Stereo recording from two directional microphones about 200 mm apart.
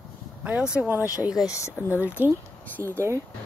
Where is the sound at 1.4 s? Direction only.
15° left (ahead or behind).